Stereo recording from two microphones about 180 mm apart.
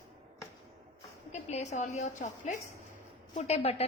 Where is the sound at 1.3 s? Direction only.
40° left (ahead or behind).